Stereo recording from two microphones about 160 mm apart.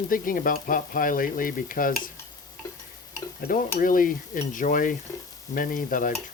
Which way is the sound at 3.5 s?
60° left (ahead or behind).